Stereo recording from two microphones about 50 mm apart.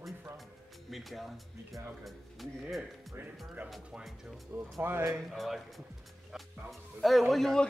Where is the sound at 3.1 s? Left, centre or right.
Right.